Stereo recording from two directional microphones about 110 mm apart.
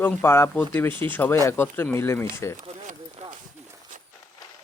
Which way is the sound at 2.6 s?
75° right (ahead or behind).